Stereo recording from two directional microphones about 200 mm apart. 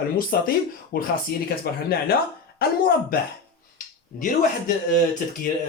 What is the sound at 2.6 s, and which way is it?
Speech, 50° left (ahead or behind).